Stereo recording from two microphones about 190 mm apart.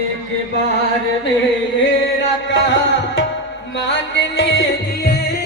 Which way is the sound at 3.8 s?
70° left (ahead or behind).